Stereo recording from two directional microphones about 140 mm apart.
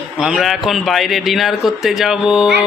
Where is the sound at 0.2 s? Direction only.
Centre (ahead or behind).